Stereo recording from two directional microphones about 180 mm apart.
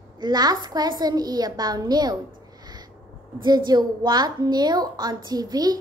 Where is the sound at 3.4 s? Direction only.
20° right (ahead or behind).